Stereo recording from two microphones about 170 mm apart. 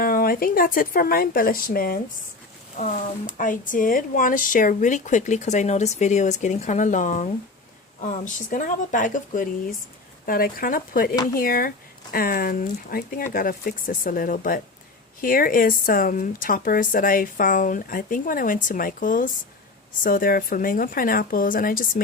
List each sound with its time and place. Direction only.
0.0 s speech: 55° left (ahead or behind)
3.3 s speech: 50° left (ahead or behind)